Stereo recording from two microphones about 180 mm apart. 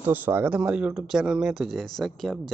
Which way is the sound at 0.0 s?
10° right (ahead or behind).